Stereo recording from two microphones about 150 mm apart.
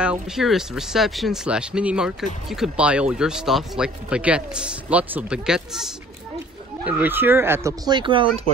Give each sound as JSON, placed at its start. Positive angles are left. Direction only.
{"t": 0.0, "sound": "speech", "side_deg": -5}
{"t": 6.9, "sound": "speech", "side_deg": -10}